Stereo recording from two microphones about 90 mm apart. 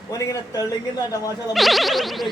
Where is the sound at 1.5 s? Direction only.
Centre (ahead or behind).